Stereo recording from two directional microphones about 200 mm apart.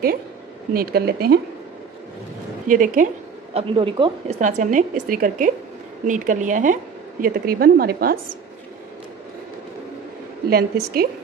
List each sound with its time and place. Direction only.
0.7 s speech: 50° right (ahead or behind)
2.7 s speech: 40° right (ahead or behind)
3.5 s a woman's voice: 25° right (ahead or behind)
4.4 s a woman's voice: 40° right (ahead or behind)
10.5 s speech: 50° right (ahead or behind)